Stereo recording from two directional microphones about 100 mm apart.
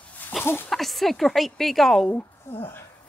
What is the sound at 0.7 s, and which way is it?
Speech, centre (ahead or behind).